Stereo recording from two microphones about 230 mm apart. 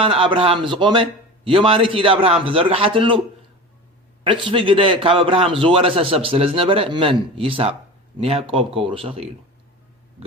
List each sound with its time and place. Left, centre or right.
0.0 s a man's voice: right
4.2 s a man's voice: right